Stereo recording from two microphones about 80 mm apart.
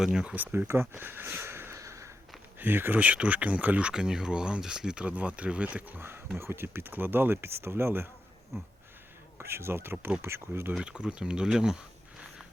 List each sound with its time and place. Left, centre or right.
0.0 s speech: centre
0.3 s a sound: right
2.6 s speech: right
10.8 s speech: centre